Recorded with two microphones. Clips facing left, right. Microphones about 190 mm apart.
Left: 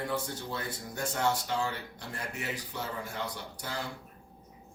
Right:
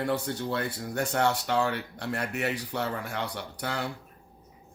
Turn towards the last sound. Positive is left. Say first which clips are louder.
# right 6 dB
turn(degrees=-70)  # may be behind; listen again after turning